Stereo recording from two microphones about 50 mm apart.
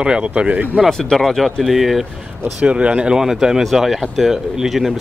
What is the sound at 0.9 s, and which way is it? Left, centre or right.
Speech, centre.